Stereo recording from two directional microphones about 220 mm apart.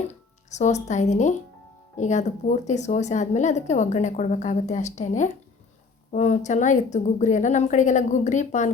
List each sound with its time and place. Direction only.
0.1 s a woman's voice: 30° left (ahead or behind)